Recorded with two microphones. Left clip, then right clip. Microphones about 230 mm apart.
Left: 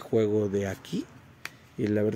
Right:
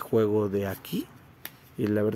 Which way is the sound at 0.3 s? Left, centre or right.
Centre.